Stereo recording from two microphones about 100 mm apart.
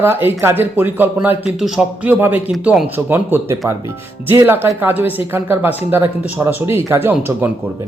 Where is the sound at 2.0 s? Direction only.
15° right (ahead or behind).